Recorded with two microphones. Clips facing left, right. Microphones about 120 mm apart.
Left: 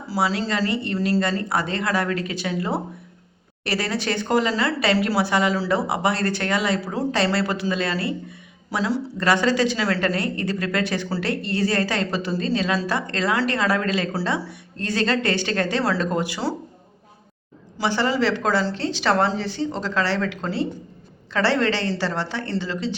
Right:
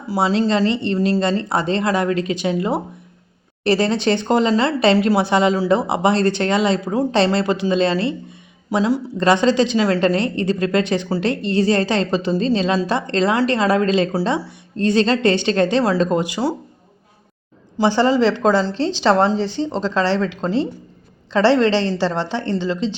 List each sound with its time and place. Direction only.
0.1 s speech: 25° right (ahead or behind)
17.7 s speech: 30° right (ahead or behind)